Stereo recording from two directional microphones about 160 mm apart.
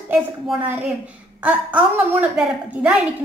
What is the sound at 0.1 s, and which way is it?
A woman's voice, 10° right (ahead or behind).